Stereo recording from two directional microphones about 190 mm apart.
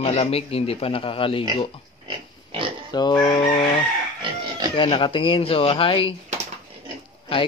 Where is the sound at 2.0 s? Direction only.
25° right (ahead or behind).